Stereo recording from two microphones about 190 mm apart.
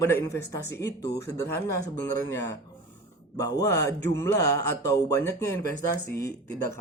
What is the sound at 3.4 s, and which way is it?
Speech, 20° left (ahead or behind).